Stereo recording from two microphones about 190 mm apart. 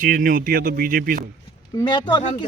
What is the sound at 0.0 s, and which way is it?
Speech, 45° right (ahead or behind).